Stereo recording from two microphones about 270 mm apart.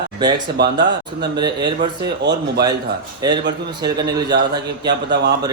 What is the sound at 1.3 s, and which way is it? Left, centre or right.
Speech, centre.